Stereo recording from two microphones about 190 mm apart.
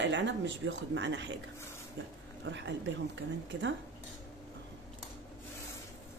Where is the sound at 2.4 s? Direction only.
70° right (ahead or behind).